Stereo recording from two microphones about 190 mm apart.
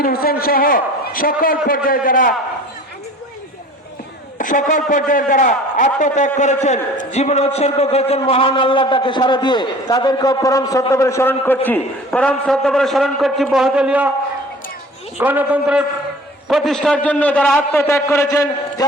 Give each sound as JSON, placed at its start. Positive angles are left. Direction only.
{"t": 0.0, "sound": "a man's voice", "side_deg": 50}
{"t": 4.4, "sound": "a man's voice", "side_deg": 45}
{"t": 15.2, "sound": "a man's voice", "side_deg": -10}